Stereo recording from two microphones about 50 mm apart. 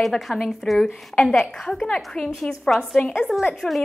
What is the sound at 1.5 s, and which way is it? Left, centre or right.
Speech, centre.